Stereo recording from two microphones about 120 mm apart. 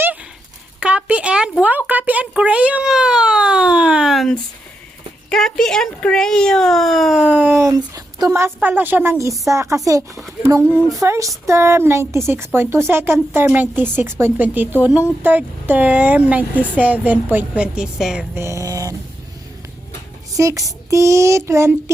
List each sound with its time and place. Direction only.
0.8 s a sound: 10° right (ahead or behind)
5.3 s speech: 5° left (ahead or behind)
7.3 s speech: 15° right (ahead or behind)
7.7 s a sound: 30° right (ahead or behind)
8.3 s speech: 20° right (ahead or behind)
9.5 s child singing: 25° right (ahead or behind)
13.3 s speech: 15° right (ahead or behind)
18.3 s child singing: 25° right (ahead or behind)
20.3 s child singing: 25° right (ahead or behind)